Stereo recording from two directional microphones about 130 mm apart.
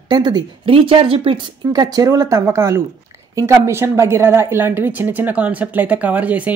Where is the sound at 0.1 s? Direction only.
30° right (ahead or behind).